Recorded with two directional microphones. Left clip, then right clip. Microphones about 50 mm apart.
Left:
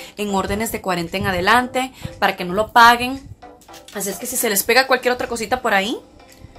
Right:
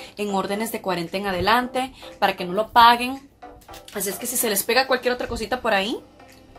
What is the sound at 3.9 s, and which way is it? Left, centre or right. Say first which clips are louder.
Speech: left 2 dB; centre.